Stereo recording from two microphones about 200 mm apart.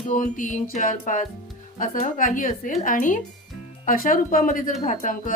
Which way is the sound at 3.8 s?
45° left (ahead or behind).